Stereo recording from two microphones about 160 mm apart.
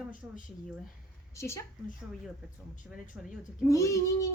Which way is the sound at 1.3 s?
20° left (ahead or behind).